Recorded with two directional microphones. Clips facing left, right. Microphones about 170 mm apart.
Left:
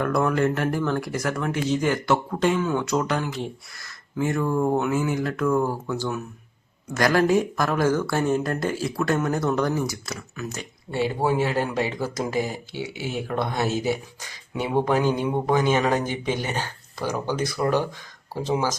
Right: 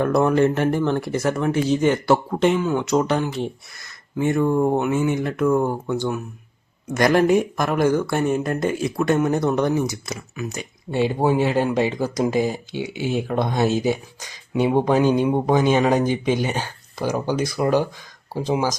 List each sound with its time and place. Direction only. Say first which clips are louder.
0.0 s speech: right 5 dB; 25° right (ahead or behind)